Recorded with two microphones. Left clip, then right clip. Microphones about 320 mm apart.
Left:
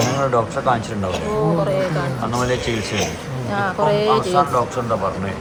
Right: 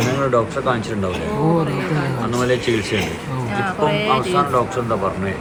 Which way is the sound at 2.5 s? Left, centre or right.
Left.